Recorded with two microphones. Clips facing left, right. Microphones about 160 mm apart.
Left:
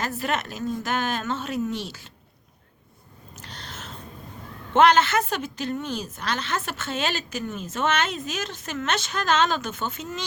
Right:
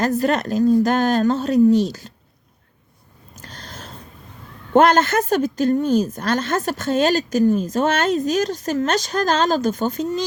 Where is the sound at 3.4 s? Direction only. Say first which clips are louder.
Right 3 dB; 45° right (ahead or behind).